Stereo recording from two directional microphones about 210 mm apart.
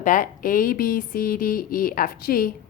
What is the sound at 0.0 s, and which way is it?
A woman's voice, 40° left (ahead or behind).